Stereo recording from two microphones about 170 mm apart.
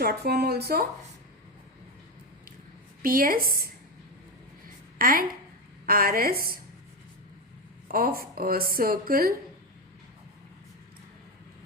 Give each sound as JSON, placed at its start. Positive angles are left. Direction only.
{"t": 0.0, "sound": "speech", "side_deg": -65}
{"t": 3.0, "sound": "a woman's voice", "side_deg": -55}
{"t": 4.9, "sound": "a woman's voice", "side_deg": -55}
{"t": 7.9, "sound": "a woman's voice", "side_deg": -60}